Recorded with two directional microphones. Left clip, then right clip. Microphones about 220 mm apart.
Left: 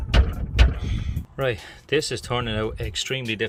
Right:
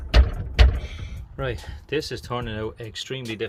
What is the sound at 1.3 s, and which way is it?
Speech, 15° left (ahead or behind).